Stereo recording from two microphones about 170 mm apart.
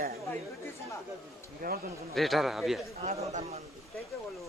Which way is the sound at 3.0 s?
40° right (ahead or behind).